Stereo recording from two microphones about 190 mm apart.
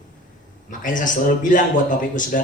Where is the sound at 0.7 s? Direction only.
45° left (ahead or behind).